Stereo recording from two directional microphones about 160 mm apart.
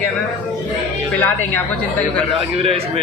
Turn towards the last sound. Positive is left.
turn(degrees=-35)  # may be behind; listen again after turning